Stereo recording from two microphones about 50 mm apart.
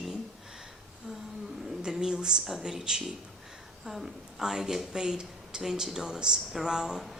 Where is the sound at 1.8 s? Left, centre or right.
Centre.